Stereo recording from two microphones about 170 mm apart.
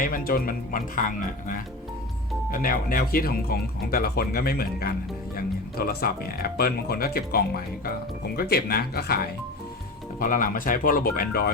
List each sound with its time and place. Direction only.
0.0 s speech: 55° left (ahead or behind)
10.2 s speech: 55° left (ahead or behind)